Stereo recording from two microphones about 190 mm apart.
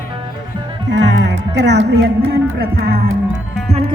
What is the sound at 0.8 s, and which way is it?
Speech, 70° right (ahead or behind).